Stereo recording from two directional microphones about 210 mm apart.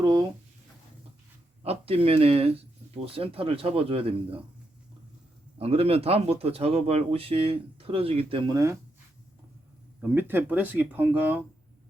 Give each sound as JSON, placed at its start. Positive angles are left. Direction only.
{"t": 0.0, "sound": "speech", "side_deg": -20}
{"t": 1.6, "sound": "speech", "side_deg": -30}
{"t": 5.5, "sound": "speech", "side_deg": -30}
{"t": 10.0, "sound": "speech", "side_deg": -10}